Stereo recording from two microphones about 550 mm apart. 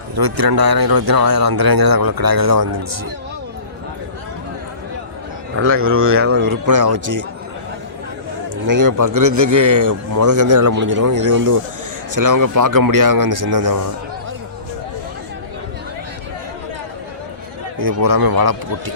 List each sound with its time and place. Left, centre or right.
0.2 s speech: right
5.5 s speech: right
8.6 s speech: right
17.7 s speech: right